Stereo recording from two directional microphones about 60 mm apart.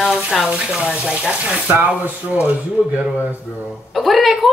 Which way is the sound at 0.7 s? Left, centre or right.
Centre.